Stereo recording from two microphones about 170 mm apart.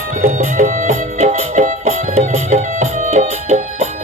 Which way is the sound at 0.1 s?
50° right (ahead or behind).